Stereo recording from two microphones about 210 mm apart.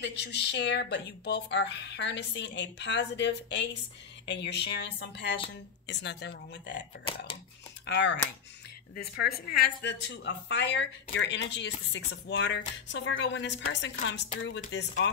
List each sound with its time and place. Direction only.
0.0 s speech: 50° left (ahead or behind)
7.8 s speech: 55° left (ahead or behind)
8.9 s speech: 45° left (ahead or behind)